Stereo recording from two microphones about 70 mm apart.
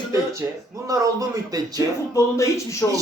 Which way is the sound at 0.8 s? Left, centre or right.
Right.